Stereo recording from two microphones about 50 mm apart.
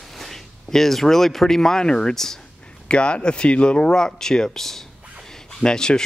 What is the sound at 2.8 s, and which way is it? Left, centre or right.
Speech, left.